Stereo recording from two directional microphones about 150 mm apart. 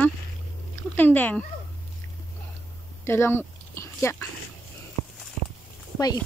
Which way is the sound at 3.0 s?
15° left (ahead or behind).